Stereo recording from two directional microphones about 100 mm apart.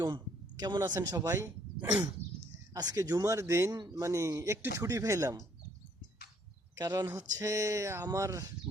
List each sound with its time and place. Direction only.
0.6 s speech: 40° right (ahead or behind)
2.7 s speech: 40° right (ahead or behind)
6.7 s speech: 35° right (ahead or behind)